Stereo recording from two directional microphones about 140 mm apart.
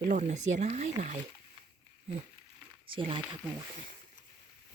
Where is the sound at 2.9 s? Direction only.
35° right (ahead or behind).